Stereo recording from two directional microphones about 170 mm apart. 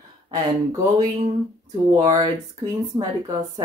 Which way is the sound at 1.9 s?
20° right (ahead or behind).